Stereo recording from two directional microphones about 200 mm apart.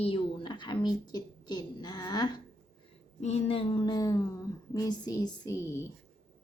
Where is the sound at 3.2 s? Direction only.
30° left (ahead or behind).